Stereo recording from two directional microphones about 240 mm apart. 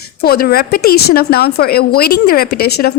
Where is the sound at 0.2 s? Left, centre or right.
Left.